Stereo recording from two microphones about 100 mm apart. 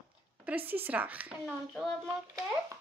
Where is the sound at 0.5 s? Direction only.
20° right (ahead or behind).